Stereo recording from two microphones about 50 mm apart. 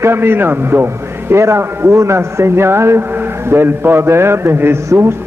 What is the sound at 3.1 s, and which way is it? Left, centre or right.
A man's voice, right.